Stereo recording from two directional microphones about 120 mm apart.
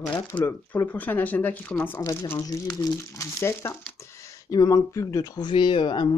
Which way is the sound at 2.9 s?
25° left (ahead or behind).